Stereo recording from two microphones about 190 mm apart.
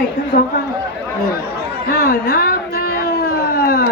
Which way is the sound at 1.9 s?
50° left (ahead or behind).